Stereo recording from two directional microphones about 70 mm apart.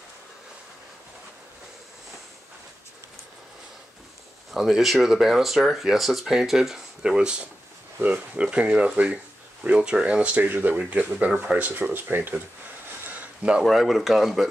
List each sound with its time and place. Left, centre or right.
4.5 s speech: centre; by 12.4 s right
13.0 s a sound: right
13.6 s speech: centre